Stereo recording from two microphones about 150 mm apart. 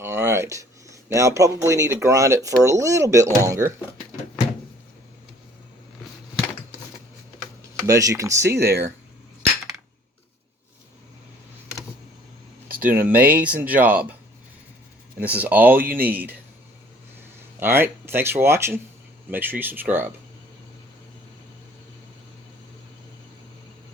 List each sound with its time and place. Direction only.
0.0 s speech: 15° right (ahead or behind)
7.9 s speech: 20° right (ahead or behind)
12.8 s speech: 10° right (ahead or behind)
15.2 s speech: 10° right (ahead or behind)
17.6 s speech: 15° right (ahead or behind)